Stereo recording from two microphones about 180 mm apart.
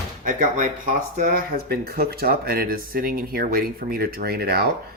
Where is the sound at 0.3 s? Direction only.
45° right (ahead or behind).